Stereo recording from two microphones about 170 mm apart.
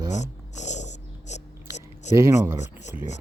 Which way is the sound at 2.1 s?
15° right (ahead or behind).